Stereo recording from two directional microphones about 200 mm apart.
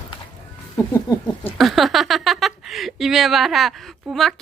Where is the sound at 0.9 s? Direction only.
10° left (ahead or behind).